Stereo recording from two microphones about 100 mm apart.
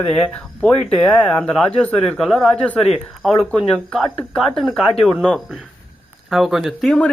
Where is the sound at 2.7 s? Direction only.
90° left.